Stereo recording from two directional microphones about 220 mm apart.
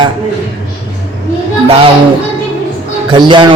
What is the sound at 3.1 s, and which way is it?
Speech, 20° right (ahead or behind).